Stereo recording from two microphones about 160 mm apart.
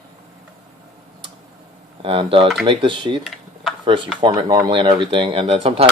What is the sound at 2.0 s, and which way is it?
Speech, 35° right (ahead or behind).